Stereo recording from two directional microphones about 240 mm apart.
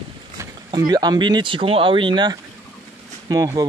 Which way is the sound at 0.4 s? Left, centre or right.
Centre.